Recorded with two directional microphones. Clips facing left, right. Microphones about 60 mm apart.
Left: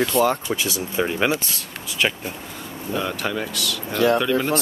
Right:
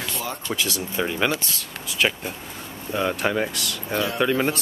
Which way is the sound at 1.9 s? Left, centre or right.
Centre.